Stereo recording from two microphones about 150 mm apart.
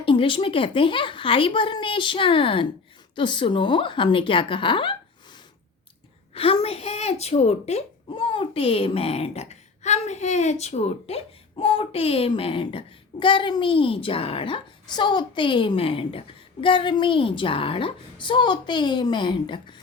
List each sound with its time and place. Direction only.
0.0 s speech: 35° left (ahead or behind)